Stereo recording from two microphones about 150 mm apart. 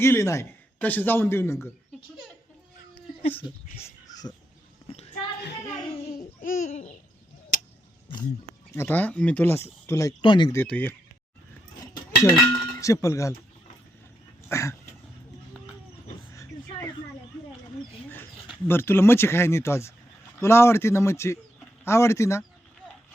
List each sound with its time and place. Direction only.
0.0 s speech: 15° left (ahead or behind)
3.4 s dog: 30° left (ahead or behind)
3.8 s a sound: 25° left (ahead or behind)
6.7 s babbling: 50° left (ahead or behind)
8.7 s speech: 15° left (ahead or behind)
10.2 s speech: 30° left (ahead or behind)
10.5 s speech: 15° left (ahead or behind)
11.9 s speech: 20° left (ahead or behind)
14.5 s dog: 20° left (ahead or behind)
18.7 s speech: 15° left (ahead or behind)